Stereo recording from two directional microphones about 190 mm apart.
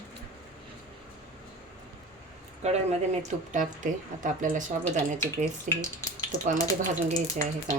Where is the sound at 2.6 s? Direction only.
35° right (ahead or behind).